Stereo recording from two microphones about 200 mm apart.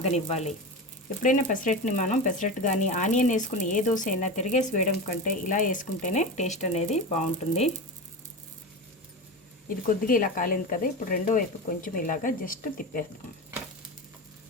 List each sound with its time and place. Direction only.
0.0 s speech: 35° left (ahead or behind)
9.6 s speech: 45° left (ahead or behind)